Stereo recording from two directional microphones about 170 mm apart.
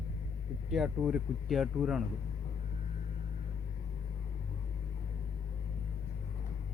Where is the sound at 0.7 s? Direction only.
5° right (ahead or behind).